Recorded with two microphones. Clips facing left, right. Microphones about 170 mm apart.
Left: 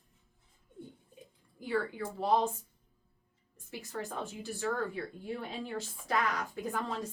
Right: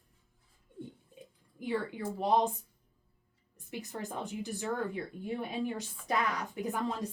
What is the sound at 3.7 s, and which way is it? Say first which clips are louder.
A woman's voice: even; 20° right (ahead or behind).